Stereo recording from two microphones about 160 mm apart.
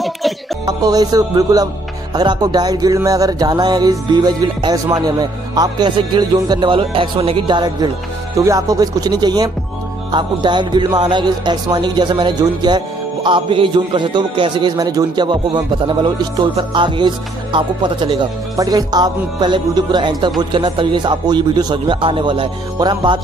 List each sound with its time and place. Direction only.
0.7 s speech: 25° right (ahead or behind)